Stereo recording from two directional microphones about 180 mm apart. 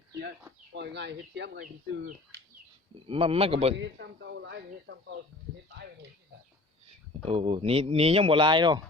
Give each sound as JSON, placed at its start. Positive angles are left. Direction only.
{"t": 0.7, "sound": "speech", "side_deg": -70}
{"t": 3.1, "sound": "speech", "side_deg": -30}
{"t": 3.8, "sound": "speech", "side_deg": -75}
{"t": 7.3, "sound": "speech", "side_deg": -35}